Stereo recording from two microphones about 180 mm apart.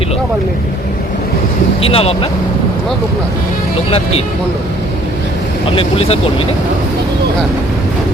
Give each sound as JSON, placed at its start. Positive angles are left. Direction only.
{"t": 1.8, "sound": "speech", "side_deg": 30}
{"t": 3.8, "sound": "speech", "side_deg": 30}
{"t": 5.7, "sound": "speech", "side_deg": 35}